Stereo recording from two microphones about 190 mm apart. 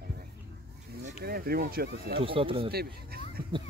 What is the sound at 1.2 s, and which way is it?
Speech, 50° right (ahead or behind).